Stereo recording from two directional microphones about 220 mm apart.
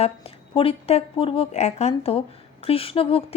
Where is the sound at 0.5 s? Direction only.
25° left (ahead or behind).